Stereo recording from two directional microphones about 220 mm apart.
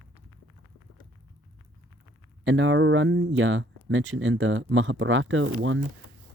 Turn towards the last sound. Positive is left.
turn(degrees=-60)  # may be behind; listen again after turning